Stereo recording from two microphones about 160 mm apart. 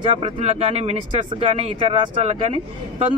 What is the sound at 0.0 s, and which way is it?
A man's voice, 35° right (ahead or behind).